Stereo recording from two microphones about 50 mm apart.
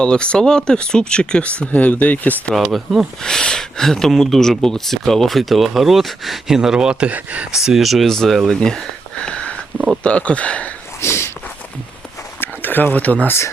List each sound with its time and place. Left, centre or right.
0.0 s speech: centre
2.6 s speech: centre
3.2 s speech: centre
6.6 s speech: centre
7.1 s speech: right
7.5 s speech: centre
8.0 s speech: centre
8.4 s a sound: centre
10.0 s speech: left
11.0 s a sound: left
12.4 s a sound: left